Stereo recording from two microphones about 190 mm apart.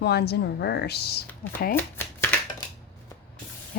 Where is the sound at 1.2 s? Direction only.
10° left (ahead or behind).